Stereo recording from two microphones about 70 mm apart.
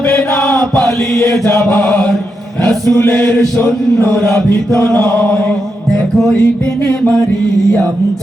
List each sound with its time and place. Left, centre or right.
0.3 s chant: left
1.8 s chant: centre
4.4 s chant: left
5.9 s music: centre